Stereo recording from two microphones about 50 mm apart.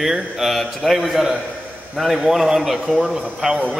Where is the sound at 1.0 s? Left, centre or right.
Centre.